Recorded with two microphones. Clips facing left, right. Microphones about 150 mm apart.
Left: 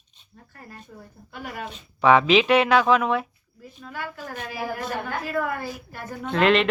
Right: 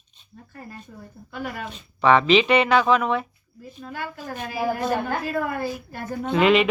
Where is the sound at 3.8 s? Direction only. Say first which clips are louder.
Right 2 dB; 35° right (ahead or behind).